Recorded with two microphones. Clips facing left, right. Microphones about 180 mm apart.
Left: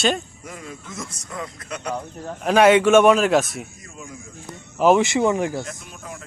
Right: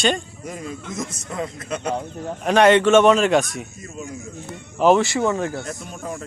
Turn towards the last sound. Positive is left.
turn(degrees=-40)  # may be behind; listen again after turning